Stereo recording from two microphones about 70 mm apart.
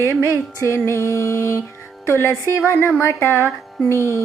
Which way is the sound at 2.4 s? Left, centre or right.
Left.